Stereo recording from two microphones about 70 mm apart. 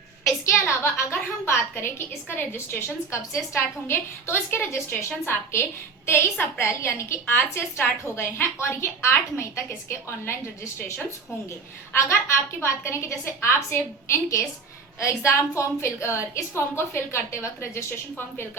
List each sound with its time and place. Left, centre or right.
0.4 s a woman's voice: left